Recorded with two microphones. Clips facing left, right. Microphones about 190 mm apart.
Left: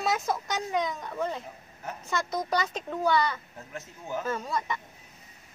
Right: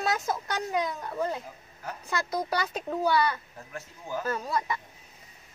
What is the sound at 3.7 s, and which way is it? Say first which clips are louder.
Speech: even; 20° left (ahead or behind).